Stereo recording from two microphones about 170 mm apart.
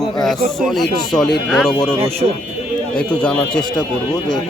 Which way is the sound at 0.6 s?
Centre (ahead or behind).